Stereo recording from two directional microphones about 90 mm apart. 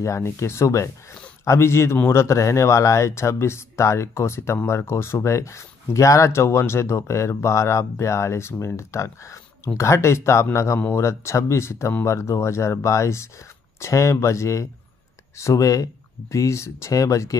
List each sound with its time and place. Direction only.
0.0 s speech: 35° left (ahead or behind)